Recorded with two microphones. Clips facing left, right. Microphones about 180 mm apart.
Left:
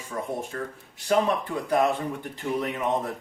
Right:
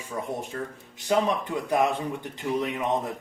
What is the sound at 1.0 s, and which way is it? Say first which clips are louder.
Speech: left 1 dB; 20° right (ahead or behind).